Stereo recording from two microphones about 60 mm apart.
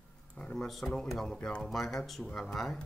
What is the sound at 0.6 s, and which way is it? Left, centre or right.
Speech, centre.